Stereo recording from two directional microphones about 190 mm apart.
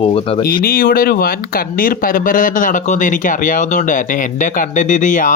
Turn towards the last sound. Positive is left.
turn(degrees=45)  # may be behind; listen again after turning